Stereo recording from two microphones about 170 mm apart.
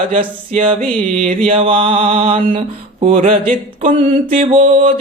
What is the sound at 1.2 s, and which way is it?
Speech, 45° right (ahead or behind).